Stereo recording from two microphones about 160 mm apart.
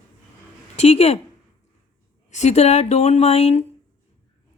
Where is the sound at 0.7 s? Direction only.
40° left (ahead or behind).